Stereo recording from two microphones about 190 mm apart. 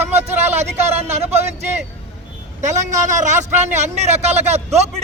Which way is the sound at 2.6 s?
40° right (ahead or behind).